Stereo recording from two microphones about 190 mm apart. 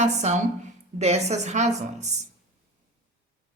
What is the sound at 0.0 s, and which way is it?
Speech, 35° right (ahead or behind).